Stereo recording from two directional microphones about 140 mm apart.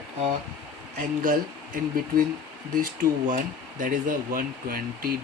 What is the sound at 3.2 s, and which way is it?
Speech, 65° right (ahead or behind).